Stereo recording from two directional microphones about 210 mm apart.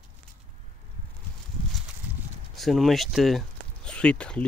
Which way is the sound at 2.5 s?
Centre (ahead or behind).